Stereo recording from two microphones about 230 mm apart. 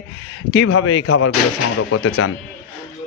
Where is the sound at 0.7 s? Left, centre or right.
Left.